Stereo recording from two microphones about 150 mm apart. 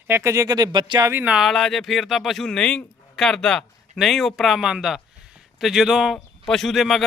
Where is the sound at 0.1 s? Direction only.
20° right (ahead or behind).